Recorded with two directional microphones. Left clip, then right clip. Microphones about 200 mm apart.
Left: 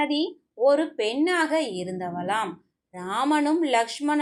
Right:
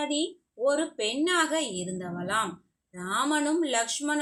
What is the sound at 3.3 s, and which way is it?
Speech, 35° right (ahead or behind).